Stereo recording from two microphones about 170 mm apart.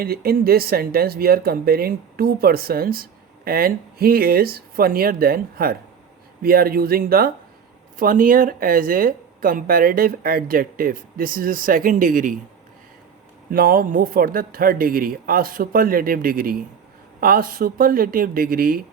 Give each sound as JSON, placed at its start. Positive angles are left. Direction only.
{"t": 0.0, "sound": "speech", "side_deg": -65}
{"t": 13.5, "sound": "speech", "side_deg": -60}